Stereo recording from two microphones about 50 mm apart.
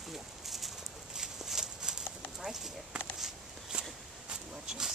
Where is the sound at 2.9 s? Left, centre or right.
Centre.